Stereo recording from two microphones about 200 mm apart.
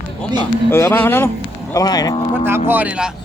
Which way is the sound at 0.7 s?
10° left (ahead or behind).